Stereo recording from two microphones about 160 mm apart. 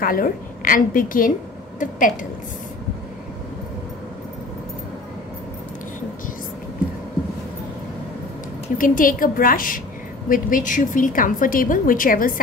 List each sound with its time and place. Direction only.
0.0 s a woman's voice: 60° left (ahead or behind)
8.7 s a woman's voice: 55° left (ahead or behind)